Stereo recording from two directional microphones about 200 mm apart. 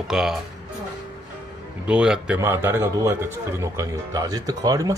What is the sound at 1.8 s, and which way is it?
A man's voice, 5° right (ahead or behind).